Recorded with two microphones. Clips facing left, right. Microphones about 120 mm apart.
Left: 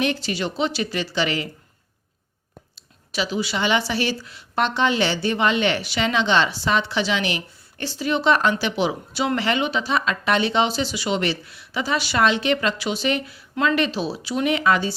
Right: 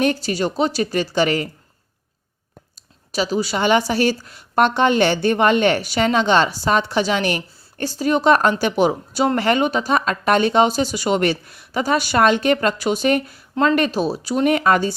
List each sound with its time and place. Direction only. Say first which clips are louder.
0.0 s a woman's voice: right 4 dB; 40° right (ahead or behind)
3.1 s a woman's voice: right 4 dB; 40° right (ahead or behind)